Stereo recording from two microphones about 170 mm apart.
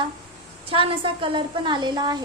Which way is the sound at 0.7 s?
30° right (ahead or behind).